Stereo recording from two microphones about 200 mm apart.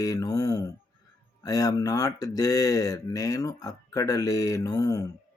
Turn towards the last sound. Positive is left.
turn(degrees=15)  # may be behind; listen again after turning